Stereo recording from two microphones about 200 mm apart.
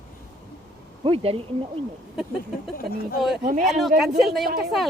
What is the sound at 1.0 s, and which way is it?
Speech, 25° right (ahead or behind).